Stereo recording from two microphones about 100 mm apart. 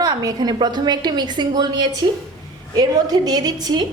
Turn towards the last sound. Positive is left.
turn(degrees=-45)  # may be behind; listen again after turning